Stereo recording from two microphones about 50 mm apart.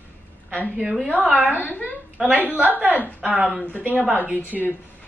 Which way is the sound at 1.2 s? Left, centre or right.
Right.